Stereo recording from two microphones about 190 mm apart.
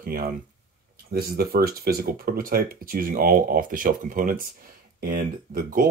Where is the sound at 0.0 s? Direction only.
50° right (ahead or behind).